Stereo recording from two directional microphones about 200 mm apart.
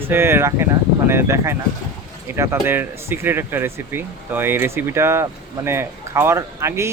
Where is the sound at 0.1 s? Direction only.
10° right (ahead or behind).